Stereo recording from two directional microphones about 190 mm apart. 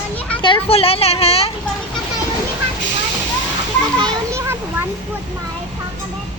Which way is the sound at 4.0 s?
20° right (ahead or behind).